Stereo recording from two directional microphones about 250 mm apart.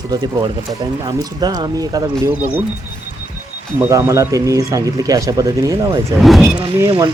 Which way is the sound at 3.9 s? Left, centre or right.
Centre.